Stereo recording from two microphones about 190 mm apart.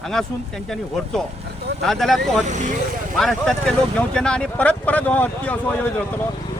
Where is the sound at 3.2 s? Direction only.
Centre (ahead or behind).